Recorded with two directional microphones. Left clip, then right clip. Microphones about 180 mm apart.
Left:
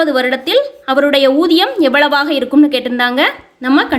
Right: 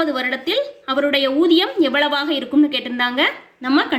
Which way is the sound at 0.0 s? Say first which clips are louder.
Left 7 dB; 50° left (ahead or behind).